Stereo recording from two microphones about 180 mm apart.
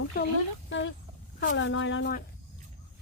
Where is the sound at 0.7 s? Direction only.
90° left.